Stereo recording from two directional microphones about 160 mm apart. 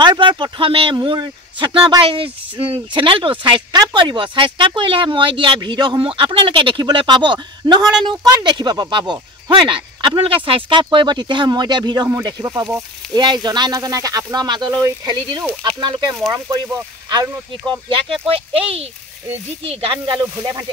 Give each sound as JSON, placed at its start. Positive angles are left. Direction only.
{"t": 0.0, "sound": "speech", "side_deg": -30}